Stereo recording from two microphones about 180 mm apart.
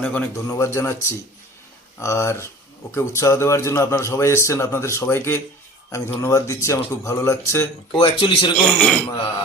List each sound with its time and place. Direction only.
0.0 s a man's voice: 5° left (ahead or behind)
7.9 s speech: 30° left (ahead or behind)
8.8 s a man's voice: 5° left (ahead or behind)